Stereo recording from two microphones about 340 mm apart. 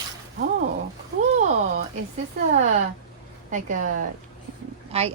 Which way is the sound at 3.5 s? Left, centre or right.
Right.